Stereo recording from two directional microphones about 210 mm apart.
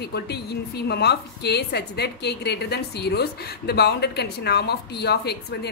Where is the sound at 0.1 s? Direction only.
50° left (ahead or behind).